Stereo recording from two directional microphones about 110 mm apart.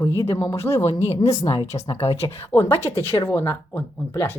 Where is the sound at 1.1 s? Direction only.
70° left (ahead or behind).